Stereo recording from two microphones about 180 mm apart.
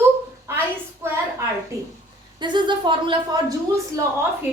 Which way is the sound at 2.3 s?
25° right (ahead or behind).